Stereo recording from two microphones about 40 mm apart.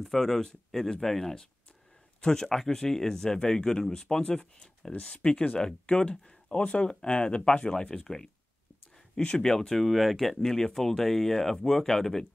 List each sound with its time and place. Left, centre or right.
0.0 s speech: centre; by 7.7 s left
8.0 s speech: centre
9.8 s speech: centre